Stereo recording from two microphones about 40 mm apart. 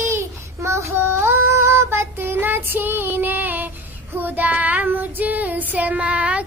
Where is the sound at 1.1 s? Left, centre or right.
Right.